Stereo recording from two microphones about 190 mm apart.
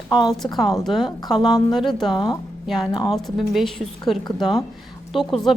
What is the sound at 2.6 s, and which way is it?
A woman's voice, centre (ahead or behind).